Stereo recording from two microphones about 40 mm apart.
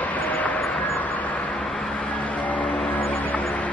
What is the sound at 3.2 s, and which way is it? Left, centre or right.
Music, left.